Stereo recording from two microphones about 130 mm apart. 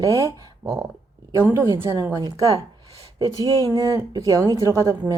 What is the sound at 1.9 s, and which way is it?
Speech, 25° right (ahead or behind).